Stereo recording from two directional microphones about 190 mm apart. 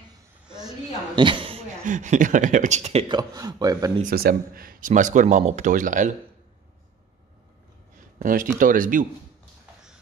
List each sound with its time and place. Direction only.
1.1 s a woman's voice: 25° right (ahead or behind)
1.9 s speech: 40° right (ahead or behind); by 3.9 s 20° right (ahead or behind)
4.0 s speech: 50° right (ahead or behind)
8.2 s speech: 45° right (ahead or behind)